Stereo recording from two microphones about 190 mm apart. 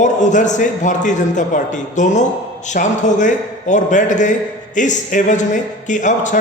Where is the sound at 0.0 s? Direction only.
40° left (ahead or behind).